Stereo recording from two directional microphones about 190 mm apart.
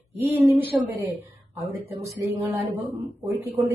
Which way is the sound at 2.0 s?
15° right (ahead or behind).